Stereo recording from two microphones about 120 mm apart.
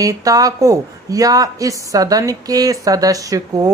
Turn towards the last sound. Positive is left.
turn(degrees=-30)  # may be behind; listen again after turning